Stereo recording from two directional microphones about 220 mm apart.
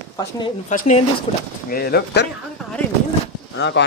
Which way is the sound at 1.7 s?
45° left (ahead or behind).